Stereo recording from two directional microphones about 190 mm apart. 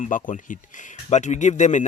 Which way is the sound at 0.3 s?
45° left (ahead or behind).